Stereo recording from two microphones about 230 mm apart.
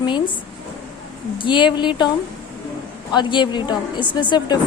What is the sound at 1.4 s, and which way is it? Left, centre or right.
Speech, left.